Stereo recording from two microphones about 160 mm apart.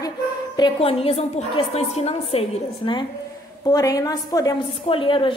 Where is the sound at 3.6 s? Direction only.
20° left (ahead or behind).